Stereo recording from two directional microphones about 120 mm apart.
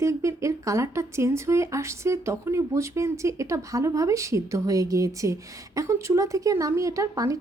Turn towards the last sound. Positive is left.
turn(degrees=-30)  # may be behind; listen again after turning